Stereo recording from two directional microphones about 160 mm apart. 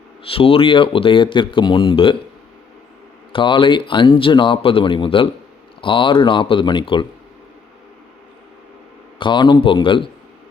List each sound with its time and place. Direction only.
0.3 s speech: 35° left (ahead or behind)
3.3 s speech: 30° left (ahead or behind)
9.1 s speech: 30° left (ahead or behind)